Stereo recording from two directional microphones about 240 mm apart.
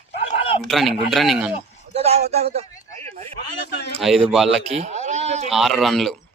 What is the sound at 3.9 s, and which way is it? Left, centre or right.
Speech, centre.